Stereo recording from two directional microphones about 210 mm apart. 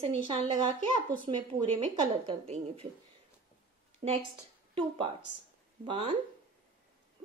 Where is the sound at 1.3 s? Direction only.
25° right (ahead or behind).